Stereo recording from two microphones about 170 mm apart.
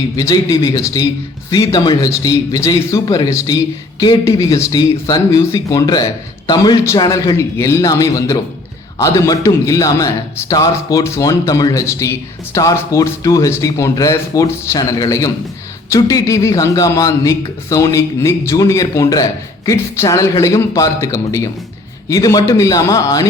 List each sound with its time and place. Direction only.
0.2 s a man's voice: 20° left (ahead or behind)